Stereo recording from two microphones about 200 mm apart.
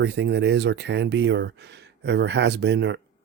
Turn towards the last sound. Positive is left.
turn(degrees=-60)  # may be behind; listen again after turning